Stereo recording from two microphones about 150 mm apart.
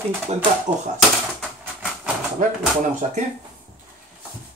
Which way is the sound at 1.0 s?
Centre (ahead or behind).